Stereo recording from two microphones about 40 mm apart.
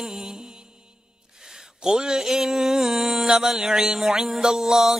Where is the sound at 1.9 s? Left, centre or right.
Centre.